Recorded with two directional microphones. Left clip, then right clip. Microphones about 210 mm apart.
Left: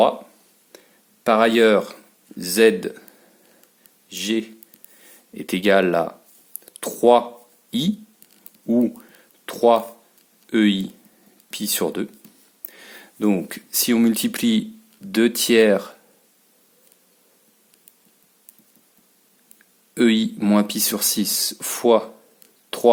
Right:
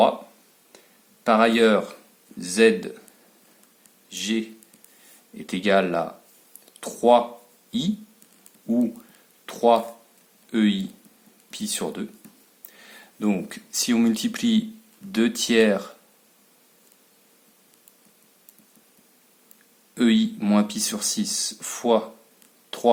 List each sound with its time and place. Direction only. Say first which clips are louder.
1.2 s speech: left 2 dB; 35° left (ahead or behind)
4.1 s speech: left 3 dB; 30° left (ahead or behind)
19.9 s speech: left 3 dB; 30° left (ahead or behind)
22.7 s a sound: left 6 dB; 30° left (ahead or behind)